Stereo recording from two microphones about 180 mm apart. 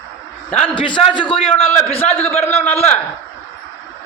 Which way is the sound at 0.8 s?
25° left (ahead or behind).